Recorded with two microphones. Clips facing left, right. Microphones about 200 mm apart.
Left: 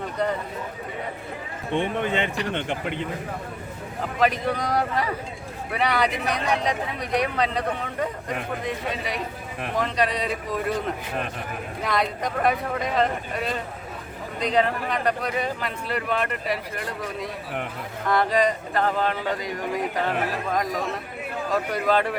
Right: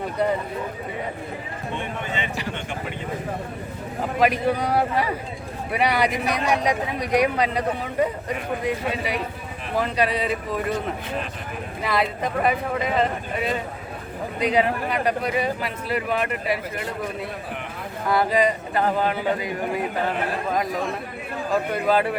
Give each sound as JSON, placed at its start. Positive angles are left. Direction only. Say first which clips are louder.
{"t": 2.0, "sound": "speech", "louder": "left 5 dB", "side_deg": 60}
{"t": 4.2, "sound": "speech", "louder": "right 2 dB", "side_deg": -10}
{"t": 11.8, "sound": "speech", "louder": "right 2 dB", "side_deg": -5}
{"t": 18.1, "sound": "speech", "louder": "right 1 dB", "side_deg": -5}
{"t": 21.5, "sound": "speech", "louder": "right 2 dB", "side_deg": -5}